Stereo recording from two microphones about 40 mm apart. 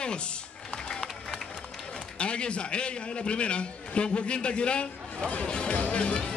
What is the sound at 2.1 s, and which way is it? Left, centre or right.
A man's voice, left.